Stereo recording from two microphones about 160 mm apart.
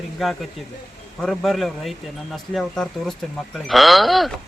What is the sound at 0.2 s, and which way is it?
Speech, centre (ahead or behind).